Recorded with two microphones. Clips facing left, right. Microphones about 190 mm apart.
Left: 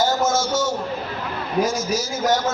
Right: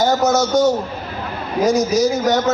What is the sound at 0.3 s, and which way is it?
Speech, 65° right (ahead or behind).